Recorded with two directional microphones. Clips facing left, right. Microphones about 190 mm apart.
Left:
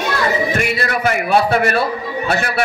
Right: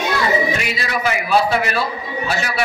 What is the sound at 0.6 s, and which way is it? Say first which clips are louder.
A man's voice: left 4 dB; 55° left (ahead or behind).